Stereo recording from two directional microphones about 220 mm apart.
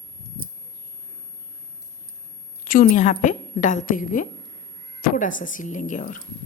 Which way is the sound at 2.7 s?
35° left (ahead or behind).